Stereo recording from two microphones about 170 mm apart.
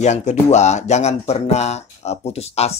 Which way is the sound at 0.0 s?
45° left (ahead or behind).